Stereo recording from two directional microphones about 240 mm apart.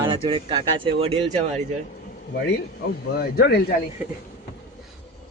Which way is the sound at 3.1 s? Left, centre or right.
Left.